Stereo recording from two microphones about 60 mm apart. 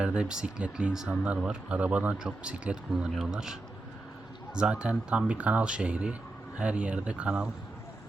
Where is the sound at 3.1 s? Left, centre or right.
Centre.